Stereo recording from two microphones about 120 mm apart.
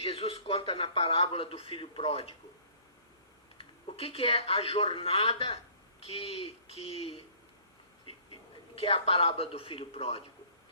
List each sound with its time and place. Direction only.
0.0 s speech: 55° left (ahead or behind)
3.6 s speech: 55° left (ahead or behind)
8.1 s a sound: 55° left (ahead or behind)
8.7 s speech: 50° left (ahead or behind)